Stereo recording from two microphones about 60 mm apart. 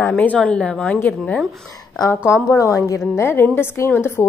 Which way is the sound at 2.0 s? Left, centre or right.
Left.